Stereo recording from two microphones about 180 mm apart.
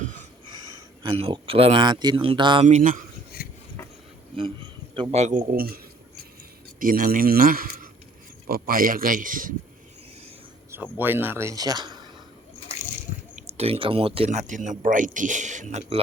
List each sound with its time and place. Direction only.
0.5 s speech: 25° right (ahead or behind)
2.6 s speech: 45° right (ahead or behind)
3.3 s filing: 60° left (ahead or behind)
4.4 s a man's voice: 30° right (ahead or behind)
5.5 s speech: 55° right (ahead or behind)
10.9 s speech: 10° right (ahead or behind)
13.3 s speech: 35° right (ahead or behind)